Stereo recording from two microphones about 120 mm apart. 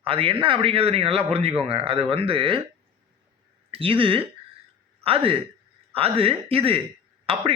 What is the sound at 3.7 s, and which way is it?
A man's voice, 50° right (ahead or behind).